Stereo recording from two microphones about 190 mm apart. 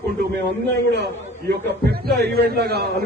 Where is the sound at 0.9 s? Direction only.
60° right (ahead or behind).